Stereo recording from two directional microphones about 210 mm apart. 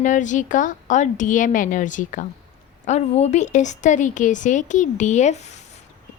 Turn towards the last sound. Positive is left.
turn(degrees=35)  # may be behind; listen again after turning